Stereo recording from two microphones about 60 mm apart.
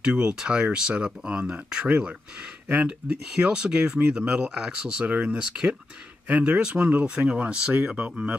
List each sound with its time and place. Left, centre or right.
0.0 s speech: centre
3.3 s speech: centre